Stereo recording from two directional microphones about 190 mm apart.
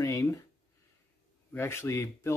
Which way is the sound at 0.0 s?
15° left (ahead or behind).